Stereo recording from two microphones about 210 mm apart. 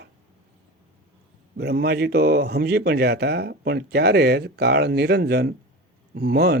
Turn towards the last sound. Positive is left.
turn(degrees=-50)  # may be behind; listen again after turning